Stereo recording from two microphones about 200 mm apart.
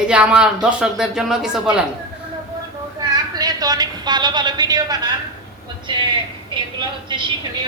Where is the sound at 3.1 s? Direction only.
20° right (ahead or behind).